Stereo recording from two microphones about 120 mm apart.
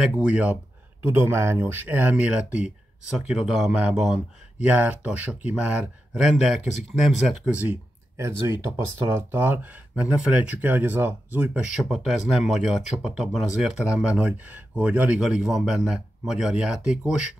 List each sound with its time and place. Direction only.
0.0 s speech: 10° right (ahead or behind)